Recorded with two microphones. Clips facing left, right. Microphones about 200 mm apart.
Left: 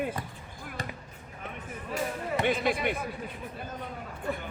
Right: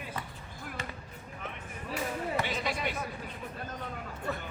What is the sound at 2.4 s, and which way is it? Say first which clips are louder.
Speech: left 7 dB; 55° left (ahead or behind).